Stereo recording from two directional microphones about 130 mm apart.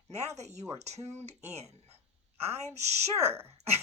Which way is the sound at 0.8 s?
60° right (ahead or behind).